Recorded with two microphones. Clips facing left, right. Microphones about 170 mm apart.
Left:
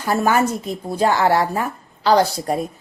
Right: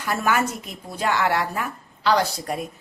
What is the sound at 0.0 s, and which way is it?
Speech, 35° left (ahead or behind).